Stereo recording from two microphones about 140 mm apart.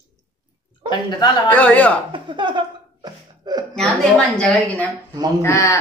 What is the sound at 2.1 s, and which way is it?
Speech, 35° right (ahead or behind).